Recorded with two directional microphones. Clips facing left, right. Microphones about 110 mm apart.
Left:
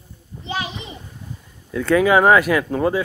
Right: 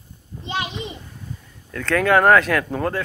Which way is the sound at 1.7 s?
10° left (ahead or behind).